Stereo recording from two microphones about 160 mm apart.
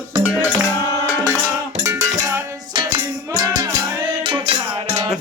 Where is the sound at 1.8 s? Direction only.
20° right (ahead or behind).